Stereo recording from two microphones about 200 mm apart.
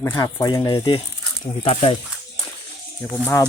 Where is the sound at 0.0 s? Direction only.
15° left (ahead or behind).